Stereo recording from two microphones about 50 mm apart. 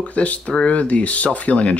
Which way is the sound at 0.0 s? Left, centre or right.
Left.